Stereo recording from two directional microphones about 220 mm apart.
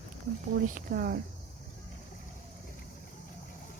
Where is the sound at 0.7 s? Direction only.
40° right (ahead or behind).